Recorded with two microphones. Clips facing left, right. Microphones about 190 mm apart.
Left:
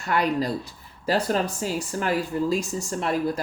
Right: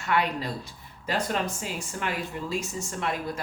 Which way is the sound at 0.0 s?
40° left (ahead or behind).